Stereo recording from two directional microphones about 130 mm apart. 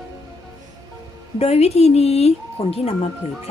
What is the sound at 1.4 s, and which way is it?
Speech, 55° left (ahead or behind).